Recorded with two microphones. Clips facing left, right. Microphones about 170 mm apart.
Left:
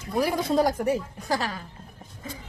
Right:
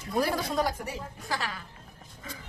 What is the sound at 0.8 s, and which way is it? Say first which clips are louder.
Speech: left 12 dB; 45° left (ahead or behind).